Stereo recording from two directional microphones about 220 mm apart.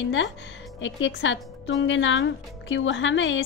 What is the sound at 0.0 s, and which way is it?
Speech, 55° left (ahead or behind).